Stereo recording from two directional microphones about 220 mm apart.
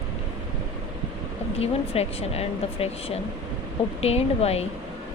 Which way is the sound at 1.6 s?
30° left (ahead or behind).